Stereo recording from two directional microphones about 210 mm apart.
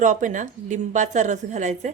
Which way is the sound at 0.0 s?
40° right (ahead or behind).